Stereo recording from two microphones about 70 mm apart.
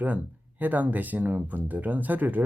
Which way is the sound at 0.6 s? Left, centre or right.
Right.